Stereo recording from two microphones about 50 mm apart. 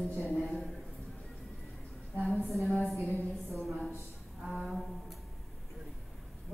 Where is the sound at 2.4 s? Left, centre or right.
Centre.